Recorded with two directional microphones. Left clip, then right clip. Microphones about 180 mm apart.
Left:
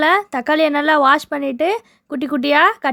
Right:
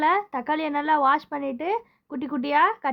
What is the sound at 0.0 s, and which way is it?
Speech, 35° left (ahead or behind).